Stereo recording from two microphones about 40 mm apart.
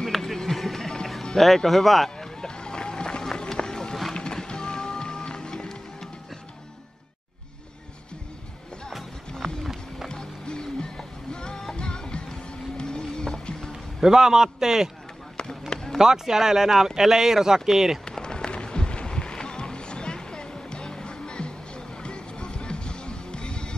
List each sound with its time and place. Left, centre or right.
0.0 s music: centre
1.4 s speech: centre
2.0 s run: centre
4.2 s music: centre
9.4 s run: centre
10.0 s music: centre
14.0 s speech: centre
15.7 s basketball bounce: centre
16.0 s speech: centre
18.0 s music: centre